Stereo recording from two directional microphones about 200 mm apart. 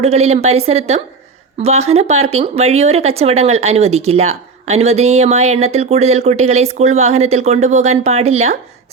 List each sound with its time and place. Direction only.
0.0 s speech: 30° right (ahead or behind)